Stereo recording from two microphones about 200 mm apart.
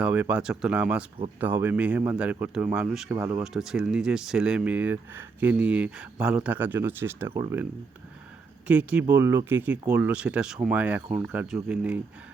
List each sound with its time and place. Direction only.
0.0 s speech: 5° right (ahead or behind)
3.4 s speech: centre (ahead or behind)